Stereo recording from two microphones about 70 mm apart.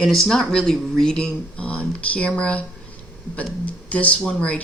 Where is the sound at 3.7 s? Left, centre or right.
Centre.